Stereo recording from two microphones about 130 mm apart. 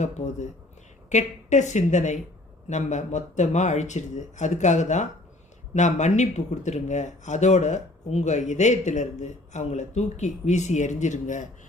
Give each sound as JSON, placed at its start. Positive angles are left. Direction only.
{"t": 1.1, "sound": "speech", "side_deg": 65}